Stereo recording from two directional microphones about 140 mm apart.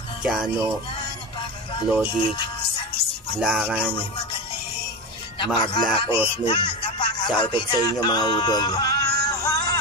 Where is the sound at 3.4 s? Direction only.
5° right (ahead or behind).